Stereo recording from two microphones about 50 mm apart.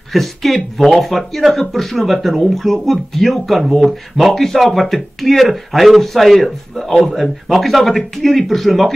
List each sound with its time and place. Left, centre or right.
0.1 s speech: centre